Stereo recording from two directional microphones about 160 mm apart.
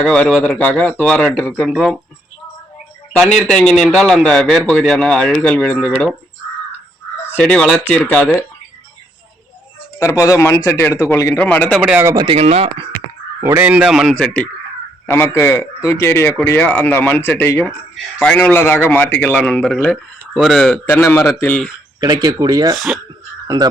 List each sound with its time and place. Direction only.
0.0 s a man's voice: 5° left (ahead or behind)
3.2 s a man's voice: centre (ahead or behind)
7.3 s a man's voice: 10° left (ahead or behind)
10.0 s a man's voice: 15° left (ahead or behind)
11.8 s a man's voice: 5° right (ahead or behind)
12.0 s speech: 25° right (ahead or behind)
13.4 s a man's voice: 15° right (ahead or behind); by 20.7 s centre (ahead or behind)
20.8 s a man's voice: 10° left (ahead or behind)
22.0 s speech: 25° right (ahead or behind)